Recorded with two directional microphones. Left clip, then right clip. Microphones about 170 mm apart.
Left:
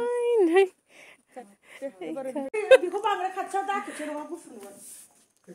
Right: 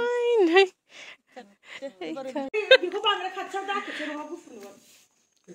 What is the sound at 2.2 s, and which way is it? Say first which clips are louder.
Speech: even; 5° left (ahead or behind).